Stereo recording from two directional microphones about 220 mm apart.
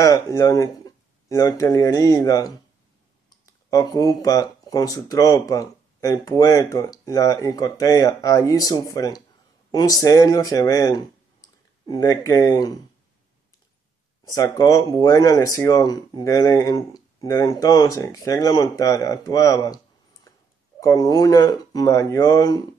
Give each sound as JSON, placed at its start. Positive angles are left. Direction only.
{"t": 0.0, "sound": "speech", "side_deg": 15}
{"t": 14.3, "sound": "speech", "side_deg": 15}
{"t": 20.8, "sound": "speech", "side_deg": 15}